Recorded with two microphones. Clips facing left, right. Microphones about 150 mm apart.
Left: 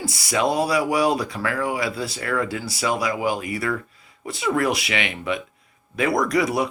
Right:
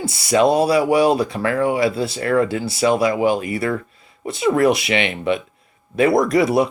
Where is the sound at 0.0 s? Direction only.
25° right (ahead or behind).